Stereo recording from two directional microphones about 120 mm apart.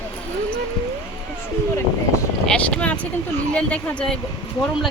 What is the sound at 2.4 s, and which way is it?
Speech, 10° left (ahead or behind).